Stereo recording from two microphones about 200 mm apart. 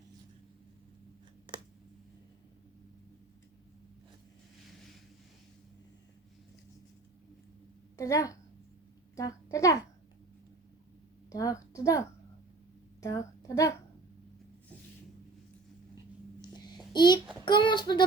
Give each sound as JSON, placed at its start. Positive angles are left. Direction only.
{"t": 7.9, "sound": "a woman's voice", "side_deg": 15}
{"t": 11.3, "sound": "a woman's voice", "side_deg": 15}
{"t": 16.4, "sound": "a sound", "side_deg": 20}
{"t": 16.9, "sound": "a child's voice", "side_deg": 20}
{"t": 17.4, "sound": "child singing", "side_deg": 25}